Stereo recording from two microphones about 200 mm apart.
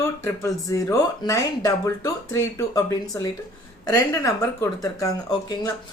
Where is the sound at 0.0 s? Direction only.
15° left (ahead or behind).